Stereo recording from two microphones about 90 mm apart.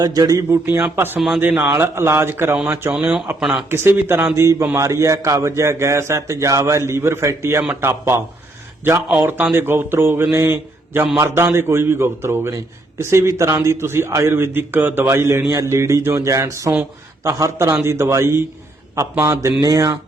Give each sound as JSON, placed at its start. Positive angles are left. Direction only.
{"t": 0.0, "sound": "a man's voice", "side_deg": -45}
{"t": 2.9, "sound": "speech", "side_deg": -10}
{"t": 3.7, "sound": "a man's voice", "side_deg": -25}
{"t": 9.4, "sound": "a man's voice", "side_deg": -25}